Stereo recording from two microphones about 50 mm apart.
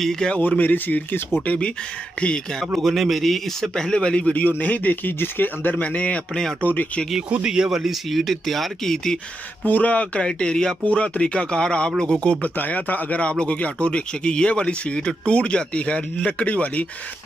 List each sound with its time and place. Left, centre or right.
0.0 s a man's voice: centre
0.4 s speech: left
2.6 s speech: centre; by 4.4 s left
4.4 s speech: left
7.4 s speech: centre
9.7 s speech: left
12.3 s speech: left